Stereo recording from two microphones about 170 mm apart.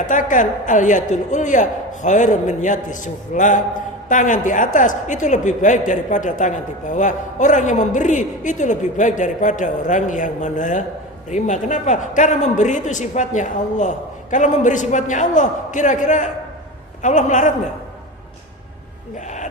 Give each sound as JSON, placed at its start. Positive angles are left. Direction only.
{"t": 0.1, "sound": "a man's voice", "side_deg": 50}